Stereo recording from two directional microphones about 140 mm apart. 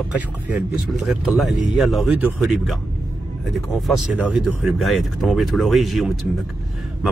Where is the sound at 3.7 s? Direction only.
Centre (ahead or behind).